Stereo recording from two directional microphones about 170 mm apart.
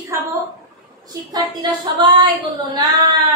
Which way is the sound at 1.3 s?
20° right (ahead or behind).